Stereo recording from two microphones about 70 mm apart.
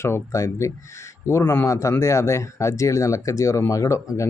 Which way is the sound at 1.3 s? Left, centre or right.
Left.